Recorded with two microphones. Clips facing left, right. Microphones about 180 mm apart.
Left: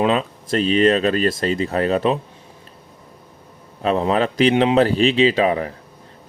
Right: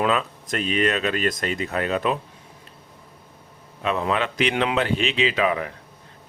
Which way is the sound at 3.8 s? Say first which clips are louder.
Left 5 dB; 35° left (ahead or behind).